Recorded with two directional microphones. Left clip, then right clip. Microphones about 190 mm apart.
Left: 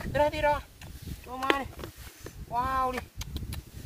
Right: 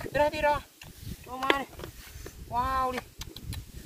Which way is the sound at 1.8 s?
25° left (ahead or behind).